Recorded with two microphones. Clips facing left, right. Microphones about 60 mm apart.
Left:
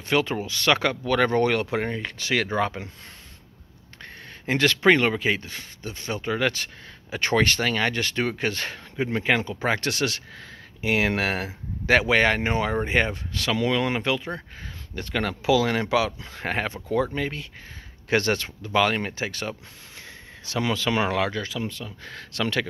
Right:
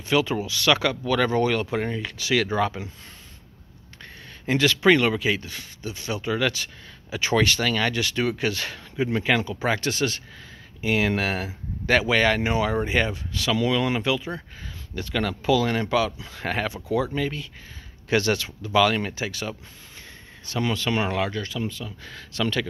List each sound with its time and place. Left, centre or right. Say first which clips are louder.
0.1 s speech: right 1 dB; left
4.0 s a sound: even; left
4.8 s speech: even; left
9.6 s speech: even; left
9.8 s speech: right 1 dB; left
15.4 s speech: left 1 dB; left
16.3 s speech: even; left
20.5 s speech: even; left
21.5 s speech: right 1 dB; left
21.8 s speech: even; left